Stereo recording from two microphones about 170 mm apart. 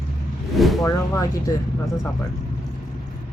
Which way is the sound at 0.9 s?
20° left (ahead or behind).